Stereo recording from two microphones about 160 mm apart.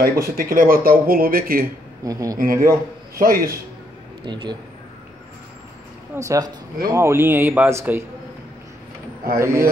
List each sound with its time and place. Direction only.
0.0 s speech: 70° right (ahead or behind)
2.0 s a man's voice: 20° right (ahead or behind)
2.3 s a man's voice: 65° right (ahead or behind)
4.2 s a man's voice: 30° right (ahead or behind)
6.1 s a man's voice: 20° right (ahead or behind)
9.4 s a man's voice: 20° right (ahead or behind)